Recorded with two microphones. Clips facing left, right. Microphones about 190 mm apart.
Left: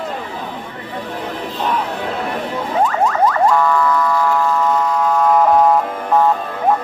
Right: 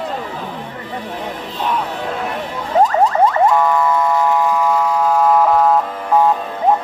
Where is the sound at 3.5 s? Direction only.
20° right (ahead or behind); by 5.8 s 5° right (ahead or behind).